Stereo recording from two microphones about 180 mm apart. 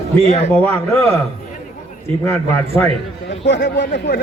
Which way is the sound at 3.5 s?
80° left.